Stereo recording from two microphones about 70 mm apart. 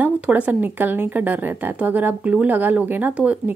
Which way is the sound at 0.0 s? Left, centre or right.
Right.